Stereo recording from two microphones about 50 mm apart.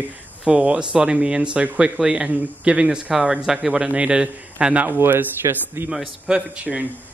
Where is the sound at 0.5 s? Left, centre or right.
Centre.